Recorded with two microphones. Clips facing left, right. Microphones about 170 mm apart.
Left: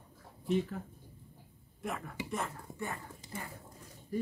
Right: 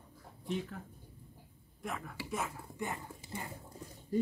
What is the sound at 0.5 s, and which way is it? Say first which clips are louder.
Speech: left 6 dB; centre (ahead or behind).